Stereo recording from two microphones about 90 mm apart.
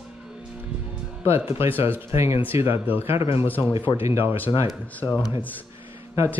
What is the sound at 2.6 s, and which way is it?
Speech, 90° left.